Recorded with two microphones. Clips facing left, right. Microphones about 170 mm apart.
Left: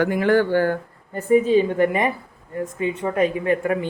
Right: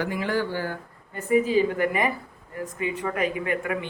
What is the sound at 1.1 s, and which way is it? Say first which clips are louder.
A woman's voice: left 5 dB; 35° left (ahead or behind).